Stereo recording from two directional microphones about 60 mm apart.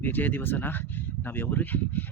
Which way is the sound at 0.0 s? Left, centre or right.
Left.